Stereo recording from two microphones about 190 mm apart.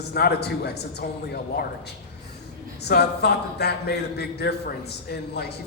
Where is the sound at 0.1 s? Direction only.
55° left (ahead or behind).